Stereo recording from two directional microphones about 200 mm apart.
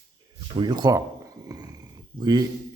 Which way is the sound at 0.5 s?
20° right (ahead or behind).